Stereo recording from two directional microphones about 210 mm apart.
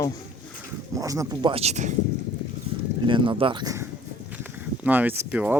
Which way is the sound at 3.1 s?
25° right (ahead or behind).